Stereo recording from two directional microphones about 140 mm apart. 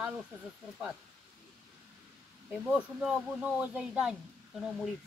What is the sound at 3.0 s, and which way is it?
Speech, 5° right (ahead or behind).